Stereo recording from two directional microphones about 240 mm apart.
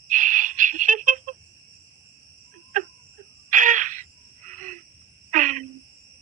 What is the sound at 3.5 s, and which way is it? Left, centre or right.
Cricket, right.